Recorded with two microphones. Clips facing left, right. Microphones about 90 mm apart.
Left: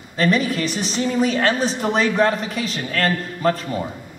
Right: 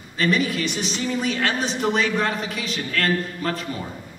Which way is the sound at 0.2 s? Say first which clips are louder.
Left 3 dB; 35° left (ahead or behind).